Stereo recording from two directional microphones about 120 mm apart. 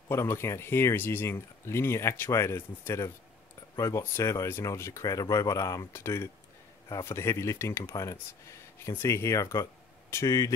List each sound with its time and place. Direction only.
0.1 s speech: 20° left (ahead or behind)